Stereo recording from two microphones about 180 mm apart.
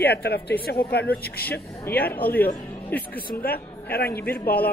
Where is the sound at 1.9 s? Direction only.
15° left (ahead or behind).